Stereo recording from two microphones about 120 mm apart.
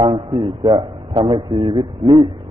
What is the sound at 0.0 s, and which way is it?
A man's voice, 45° right (ahead or behind).